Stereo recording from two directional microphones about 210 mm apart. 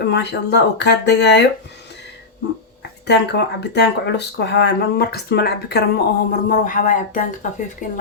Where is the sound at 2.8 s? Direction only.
55° left (ahead or behind).